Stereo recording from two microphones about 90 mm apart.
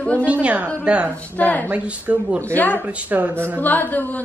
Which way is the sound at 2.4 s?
20° left (ahead or behind).